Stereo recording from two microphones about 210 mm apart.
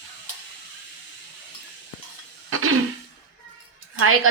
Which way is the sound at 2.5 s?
80° right.